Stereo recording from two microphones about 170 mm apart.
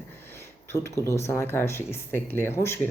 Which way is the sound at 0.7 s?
15° left (ahead or behind).